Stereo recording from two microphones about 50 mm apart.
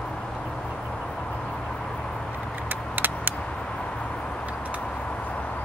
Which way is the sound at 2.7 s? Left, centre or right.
Right.